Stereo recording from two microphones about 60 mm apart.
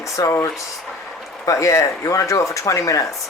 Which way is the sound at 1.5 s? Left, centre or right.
Left.